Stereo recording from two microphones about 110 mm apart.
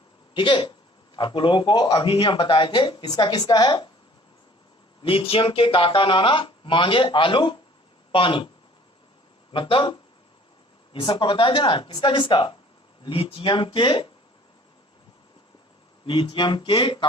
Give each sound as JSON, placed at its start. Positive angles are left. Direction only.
{"t": 0.3, "sound": "a man's voice", "side_deg": 50}
{"t": 5.0, "sound": "a man's voice", "side_deg": 55}
{"t": 9.5, "sound": "a man's voice", "side_deg": 50}
{"t": 16.0, "sound": "a man's voice", "side_deg": 45}